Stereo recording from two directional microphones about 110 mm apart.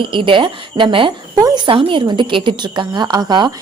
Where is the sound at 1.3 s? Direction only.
40° right (ahead or behind).